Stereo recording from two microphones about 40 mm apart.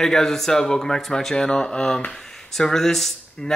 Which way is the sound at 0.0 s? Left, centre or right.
Centre.